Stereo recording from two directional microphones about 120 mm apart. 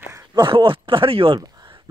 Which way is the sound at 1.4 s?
35° right (ahead or behind).